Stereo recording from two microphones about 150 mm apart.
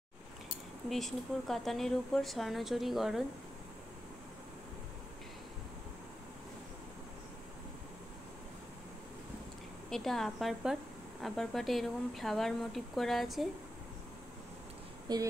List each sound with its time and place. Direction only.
0.8 s speech: centre (ahead or behind)
9.8 s speech: 5° left (ahead or behind)
15.1 s a sound: 30° right (ahead or behind)